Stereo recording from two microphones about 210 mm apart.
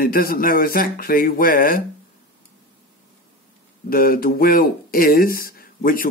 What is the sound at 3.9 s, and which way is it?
Speech, 45° left (ahead or behind).